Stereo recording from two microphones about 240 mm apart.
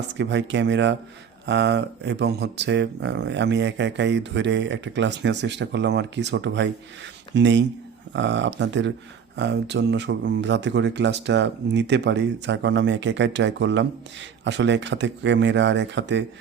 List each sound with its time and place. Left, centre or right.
0.2 s speech: right